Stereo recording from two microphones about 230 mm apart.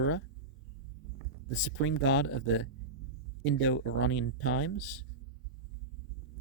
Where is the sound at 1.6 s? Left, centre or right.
Left.